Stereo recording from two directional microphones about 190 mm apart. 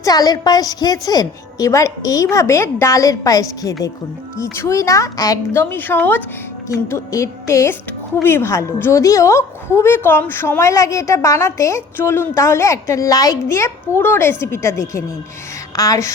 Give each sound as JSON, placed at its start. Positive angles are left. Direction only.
{"t": 0.0, "sound": "a woman's voice", "side_deg": 20}